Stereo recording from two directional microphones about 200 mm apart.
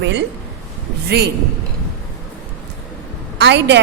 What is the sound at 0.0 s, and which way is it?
Speech, 60° right (ahead or behind).